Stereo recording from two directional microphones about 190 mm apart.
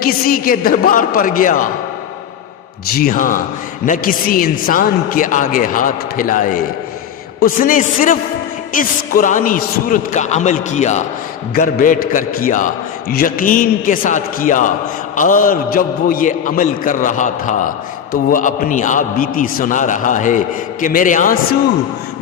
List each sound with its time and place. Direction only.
0.0 s a man's voice: 50° left (ahead or behind)
3.0 s a man's voice: 45° left (ahead or behind)